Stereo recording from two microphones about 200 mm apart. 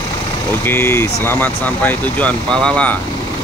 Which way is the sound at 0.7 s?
10° left (ahead or behind).